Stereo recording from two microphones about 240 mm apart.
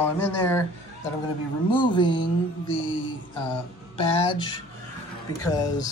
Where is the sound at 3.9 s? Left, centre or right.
Left.